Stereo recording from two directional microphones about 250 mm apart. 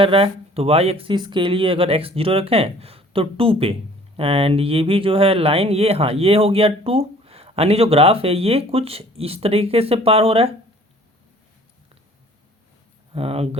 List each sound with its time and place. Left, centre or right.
0.0 s speech: right
13.1 s speech: right